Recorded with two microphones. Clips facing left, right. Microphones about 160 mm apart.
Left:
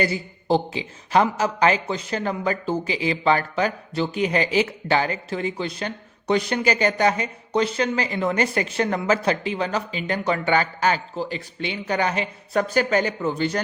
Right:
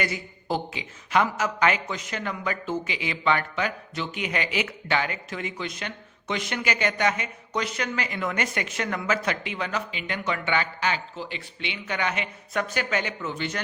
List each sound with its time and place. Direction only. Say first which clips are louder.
0.0 s a man's voice: left 6 dB; 30° left (ahead or behind)